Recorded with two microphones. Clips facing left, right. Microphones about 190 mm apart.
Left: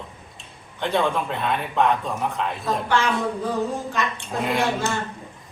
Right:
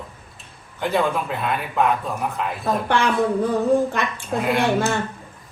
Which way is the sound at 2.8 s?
60° right (ahead or behind).